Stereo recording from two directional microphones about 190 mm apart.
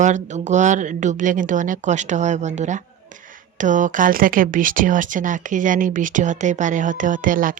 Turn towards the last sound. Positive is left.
turn(degrees=-45)  # may be behind; listen again after turning